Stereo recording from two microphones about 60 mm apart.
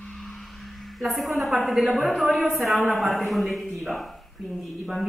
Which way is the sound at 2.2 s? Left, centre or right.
Centre.